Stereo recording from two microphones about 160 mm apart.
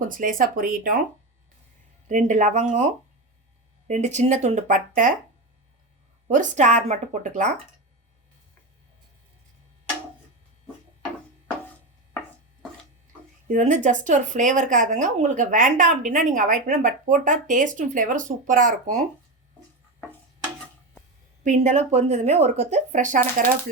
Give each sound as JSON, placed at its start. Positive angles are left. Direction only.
{"t": 0.1, "sound": "speech", "side_deg": -60}
{"t": 2.0, "sound": "a woman's voice", "side_deg": -50}
{"t": 6.2, "sound": "a woman's voice", "side_deg": -50}
{"t": 13.5, "sound": "a woman's voice", "side_deg": -50}
{"t": 21.4, "sound": "a woman's voice", "side_deg": -50}